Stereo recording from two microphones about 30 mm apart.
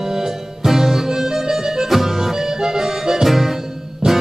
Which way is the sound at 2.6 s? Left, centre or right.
Right.